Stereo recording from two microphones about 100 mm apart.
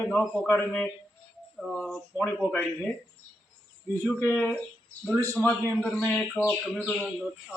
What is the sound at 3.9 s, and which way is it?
Speech, 25° left (ahead or behind).